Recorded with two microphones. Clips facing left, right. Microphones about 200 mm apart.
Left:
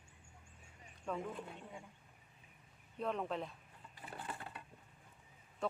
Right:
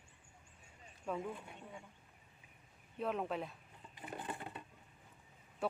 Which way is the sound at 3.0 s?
5° right (ahead or behind).